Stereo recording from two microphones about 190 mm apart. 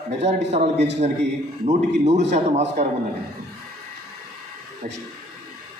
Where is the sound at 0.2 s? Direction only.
35° right (ahead or behind).